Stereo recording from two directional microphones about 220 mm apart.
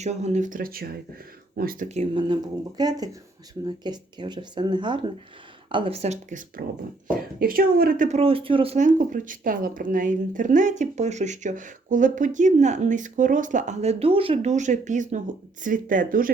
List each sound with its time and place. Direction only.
0.0 s speech: 30° right (ahead or behind)
7.3 s speech: 40° right (ahead or behind)